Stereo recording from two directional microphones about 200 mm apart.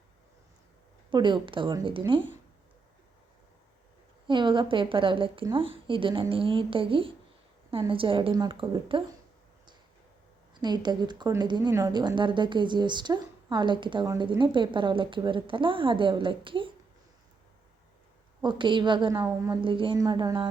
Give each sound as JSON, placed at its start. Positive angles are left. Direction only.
{"t": 1.1, "sound": "speech", "side_deg": -25}
{"t": 4.3, "sound": "speech", "side_deg": -25}
{"t": 10.5, "sound": "speech", "side_deg": -20}
{"t": 18.4, "sound": "speech", "side_deg": -25}